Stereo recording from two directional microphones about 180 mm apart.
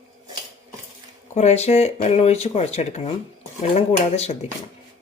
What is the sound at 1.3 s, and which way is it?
Speech, 40° left (ahead or behind).